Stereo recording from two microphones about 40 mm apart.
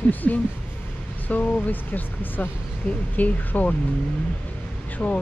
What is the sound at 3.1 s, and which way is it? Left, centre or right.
Speech, left.